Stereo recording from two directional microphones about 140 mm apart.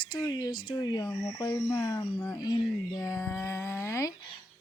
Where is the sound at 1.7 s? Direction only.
20° left (ahead or behind).